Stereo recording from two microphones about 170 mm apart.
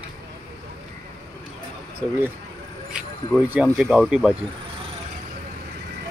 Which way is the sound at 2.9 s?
5° right (ahead or behind).